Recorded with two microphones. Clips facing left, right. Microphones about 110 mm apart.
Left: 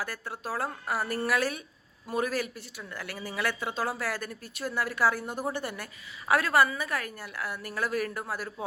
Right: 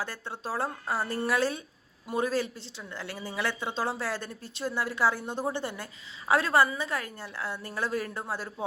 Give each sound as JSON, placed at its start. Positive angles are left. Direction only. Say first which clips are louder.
{"t": 0.0, "sound": "a woman's voice", "louder": "even", "side_deg": -25}